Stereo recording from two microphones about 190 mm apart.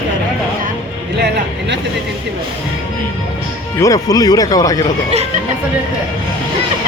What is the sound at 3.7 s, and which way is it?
Speech, 15° left (ahead or behind).